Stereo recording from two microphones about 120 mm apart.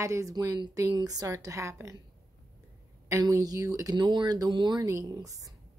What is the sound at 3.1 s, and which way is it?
A woman's voice, 25° right (ahead or behind).